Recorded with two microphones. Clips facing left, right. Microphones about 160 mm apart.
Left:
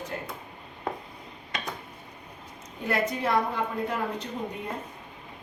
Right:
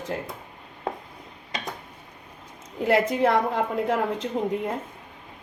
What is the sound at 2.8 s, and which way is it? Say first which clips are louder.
A woman's voice: right 7 dB; 90° right.